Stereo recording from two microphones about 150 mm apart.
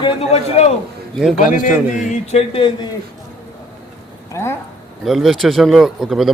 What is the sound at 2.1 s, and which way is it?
Speech, 45° left (ahead or behind).